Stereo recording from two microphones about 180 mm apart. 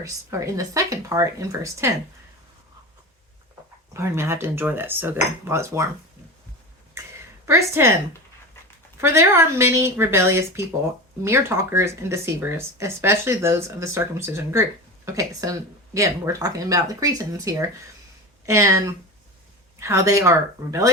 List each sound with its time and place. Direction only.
0.0 s speech: 20° right (ahead or behind)
3.9 s speech: 15° right (ahead or behind)
7.4 s speech: 15° right (ahead or behind)
9.0 s speech: 15° right (ahead or behind)
19.8 s speech: 15° right (ahead or behind)